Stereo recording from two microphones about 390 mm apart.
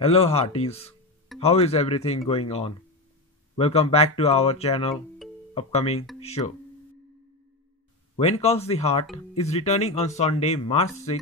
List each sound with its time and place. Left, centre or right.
0.0 s speech: centre
8.2 s speech: centre